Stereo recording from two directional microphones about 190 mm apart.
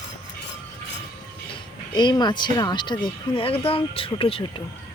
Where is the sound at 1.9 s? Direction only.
20° left (ahead or behind).